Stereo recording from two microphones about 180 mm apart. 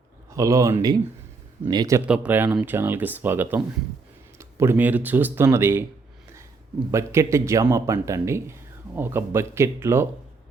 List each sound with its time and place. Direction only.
0.3 s speech: 20° right (ahead or behind)
2.0 s speech: 5° right (ahead or behind)
6.9 s speech: 15° right (ahead or behind)